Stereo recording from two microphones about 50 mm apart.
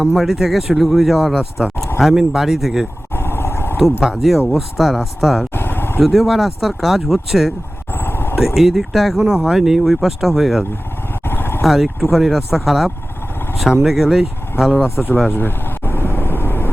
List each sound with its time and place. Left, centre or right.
0.0 s speech: centre
3.2 s vehicle: left
4.0 s speech: centre
5.5 s a sound: left
6.0 s speech: centre
7.9 s vehicle: left
8.5 s speech: centre
11.3 s vehicle: left
11.6 s speech: centre
14.8 s speech: left
15.3 s vehicle: left